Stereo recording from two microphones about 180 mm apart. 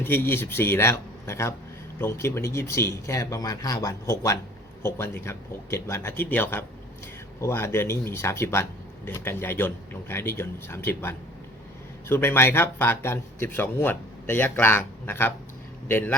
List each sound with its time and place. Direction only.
0.0 s speech: 10° left (ahead or behind)